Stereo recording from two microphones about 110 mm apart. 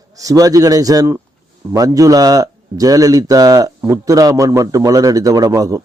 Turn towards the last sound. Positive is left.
turn(degrees=-30)  # may be behind; listen again after turning